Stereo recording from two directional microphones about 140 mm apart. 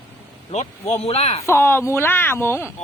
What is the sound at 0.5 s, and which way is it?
Speech, 55° left (ahead or behind).